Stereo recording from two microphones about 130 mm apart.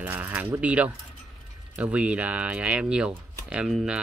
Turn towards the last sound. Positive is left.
turn(degrees=-5)  # may be behind; listen again after turning